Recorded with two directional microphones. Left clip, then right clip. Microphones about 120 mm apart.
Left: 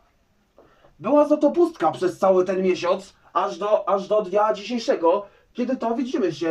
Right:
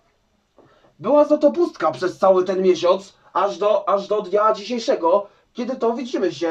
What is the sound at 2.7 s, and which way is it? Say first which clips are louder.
Speech: right 5 dB; centre (ahead or behind).